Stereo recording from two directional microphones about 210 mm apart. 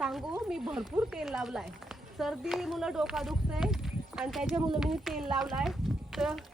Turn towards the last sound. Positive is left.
turn(degrees=0)  # may be behind; listen again after turning